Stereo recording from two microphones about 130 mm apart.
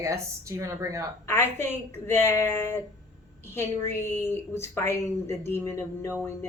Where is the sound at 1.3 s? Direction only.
20° left (ahead or behind).